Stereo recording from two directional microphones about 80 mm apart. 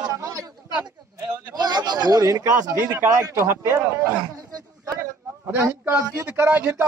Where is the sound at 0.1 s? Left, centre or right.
Right.